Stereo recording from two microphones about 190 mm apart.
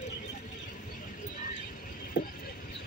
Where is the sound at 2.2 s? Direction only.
70° left (ahead or behind).